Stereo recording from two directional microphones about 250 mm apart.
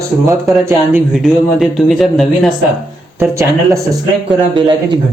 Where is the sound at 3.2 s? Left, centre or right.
Centre.